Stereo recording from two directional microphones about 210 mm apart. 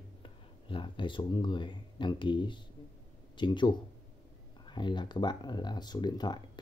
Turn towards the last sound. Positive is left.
turn(degrees=20)  # may be behind; listen again after turning